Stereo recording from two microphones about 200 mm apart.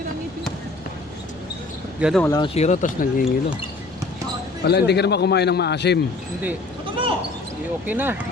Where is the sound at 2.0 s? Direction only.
5° right (ahead or behind).